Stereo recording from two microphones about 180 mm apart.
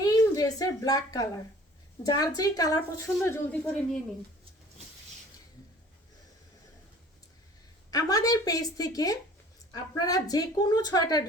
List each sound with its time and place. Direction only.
0.0 s a sound: 20° left (ahead or behind)
2.0 s speech: 20° left (ahead or behind)
7.9 s speech: 20° left (ahead or behind)